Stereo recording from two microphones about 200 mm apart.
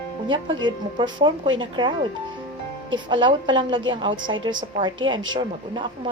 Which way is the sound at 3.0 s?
25° right (ahead or behind).